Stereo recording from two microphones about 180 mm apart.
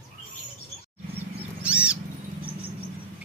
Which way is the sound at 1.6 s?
5° right (ahead or behind).